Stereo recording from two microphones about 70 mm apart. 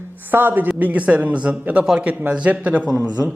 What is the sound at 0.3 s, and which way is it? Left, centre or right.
A man's voice, right.